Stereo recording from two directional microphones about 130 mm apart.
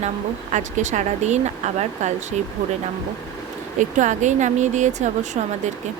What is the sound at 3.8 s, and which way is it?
Speech, 70° right (ahead or behind).